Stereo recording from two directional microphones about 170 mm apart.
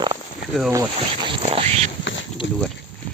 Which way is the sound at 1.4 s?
35° right (ahead or behind).